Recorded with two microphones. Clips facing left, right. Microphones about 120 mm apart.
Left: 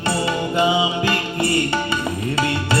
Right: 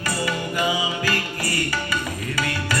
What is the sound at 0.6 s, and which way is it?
Music, 25° left (ahead or behind).